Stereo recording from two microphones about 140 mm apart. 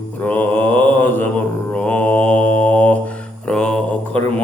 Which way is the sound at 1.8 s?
10° left (ahead or behind).